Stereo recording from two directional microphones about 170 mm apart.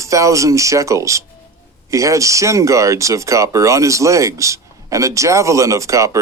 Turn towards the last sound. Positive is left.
turn(degrees=-20)  # may be behind; listen again after turning